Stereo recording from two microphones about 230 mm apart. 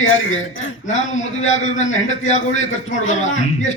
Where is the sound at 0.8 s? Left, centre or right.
Left.